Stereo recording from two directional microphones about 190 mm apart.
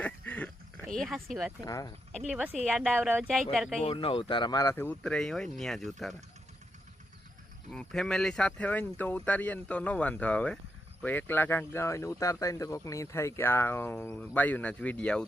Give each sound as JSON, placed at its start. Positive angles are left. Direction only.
{"t": 0.0, "sound": "a sound", "side_deg": 5}
{"t": 0.9, "sound": "speech", "side_deg": 0}
{"t": 1.6, "sound": "speech", "side_deg": 20}
{"t": 2.3, "sound": "a woman's voice", "side_deg": -5}
{"t": 2.6, "sound": "speech", "side_deg": 5}
{"t": 3.8, "sound": "speech", "side_deg": 30}
{"t": 7.7, "sound": "speech", "side_deg": 5}